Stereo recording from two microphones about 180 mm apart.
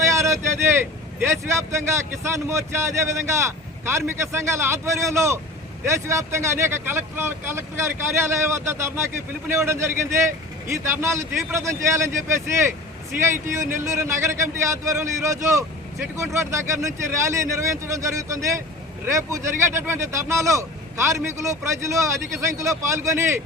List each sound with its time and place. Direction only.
0.0 s vehicle: 15° right (ahead or behind)
1.2 s speech: 15° right (ahead or behind)
13.2 s speech: 15° right (ahead or behind)